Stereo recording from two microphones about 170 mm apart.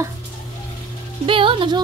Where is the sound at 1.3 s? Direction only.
30° right (ahead or behind).